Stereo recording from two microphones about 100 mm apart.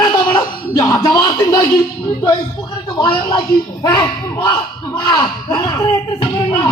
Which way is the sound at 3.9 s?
50° left (ahead or behind).